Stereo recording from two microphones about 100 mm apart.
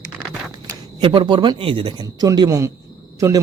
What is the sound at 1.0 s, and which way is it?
Speech, 55° right (ahead or behind).